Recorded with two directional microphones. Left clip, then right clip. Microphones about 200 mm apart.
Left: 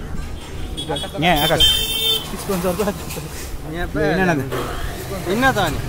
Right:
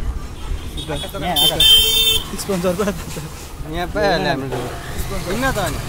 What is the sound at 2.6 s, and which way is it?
Speech, 30° right (ahead or behind).